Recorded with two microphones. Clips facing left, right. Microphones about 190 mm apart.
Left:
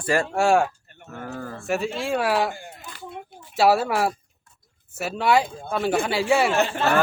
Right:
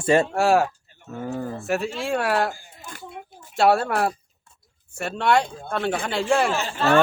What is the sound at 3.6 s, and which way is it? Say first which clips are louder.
Speech: even; 5° left (ahead or behind).